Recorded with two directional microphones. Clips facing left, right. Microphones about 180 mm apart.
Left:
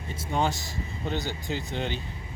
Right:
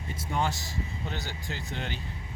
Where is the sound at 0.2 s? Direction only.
20° left (ahead or behind).